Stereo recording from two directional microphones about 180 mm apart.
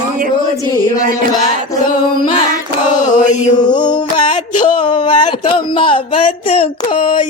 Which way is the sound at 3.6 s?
25° left (ahead or behind).